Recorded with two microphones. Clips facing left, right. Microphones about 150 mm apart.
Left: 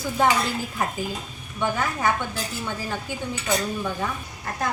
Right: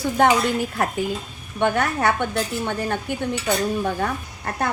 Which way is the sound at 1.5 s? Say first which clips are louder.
Right 5 dB; 70° right (ahead or behind).